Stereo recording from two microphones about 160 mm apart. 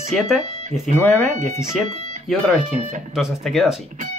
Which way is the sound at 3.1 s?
Centre (ahead or behind).